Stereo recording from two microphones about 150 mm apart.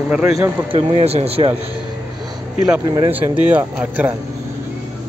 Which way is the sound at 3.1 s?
10° right (ahead or behind).